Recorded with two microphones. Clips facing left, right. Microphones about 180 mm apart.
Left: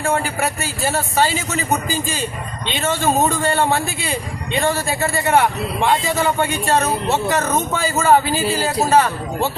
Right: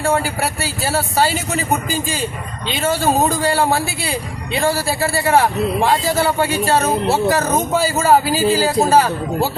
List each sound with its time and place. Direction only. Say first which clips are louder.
0.0 s a man's voice: right 2 dB; 35° right (ahead or behind)
2.6 s a man's voice: right 2 dB; 35° right (ahead or behind)
8.2 s speech: right 4 dB; 10° right (ahead or behind)
8.9 s a man's voice: right 1 dB; 35° right (ahead or behind)